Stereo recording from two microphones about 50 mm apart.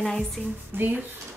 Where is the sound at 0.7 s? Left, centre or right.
Right.